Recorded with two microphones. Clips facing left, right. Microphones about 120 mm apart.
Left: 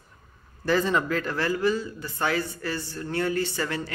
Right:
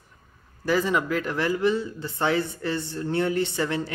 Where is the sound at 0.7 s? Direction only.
10° right (ahead or behind).